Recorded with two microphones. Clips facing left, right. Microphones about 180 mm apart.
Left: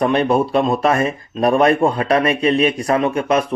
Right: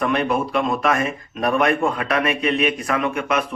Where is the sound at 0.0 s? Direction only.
30° left (ahead or behind).